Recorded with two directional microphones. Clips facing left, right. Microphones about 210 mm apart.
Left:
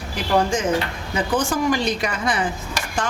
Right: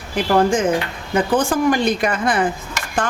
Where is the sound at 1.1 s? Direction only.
55° right (ahead or behind).